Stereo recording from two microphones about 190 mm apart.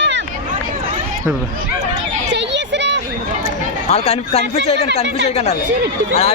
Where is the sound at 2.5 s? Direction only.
65° right (ahead or behind).